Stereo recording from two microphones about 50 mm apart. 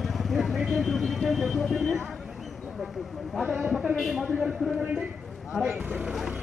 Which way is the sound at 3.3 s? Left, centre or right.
Centre.